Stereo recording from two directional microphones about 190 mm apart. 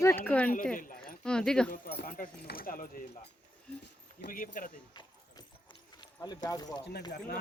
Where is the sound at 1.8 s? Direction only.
50° left (ahead or behind).